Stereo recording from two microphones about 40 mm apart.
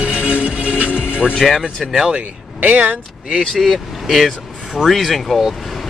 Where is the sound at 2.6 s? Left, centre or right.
Right.